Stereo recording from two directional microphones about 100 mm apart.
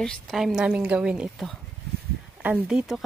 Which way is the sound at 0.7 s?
15° right (ahead or behind).